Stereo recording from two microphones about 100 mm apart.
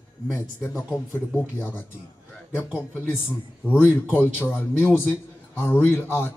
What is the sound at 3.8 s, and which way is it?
A man's voice, 20° left (ahead or behind).